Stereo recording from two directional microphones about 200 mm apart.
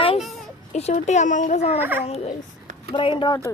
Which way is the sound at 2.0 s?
30° left (ahead or behind).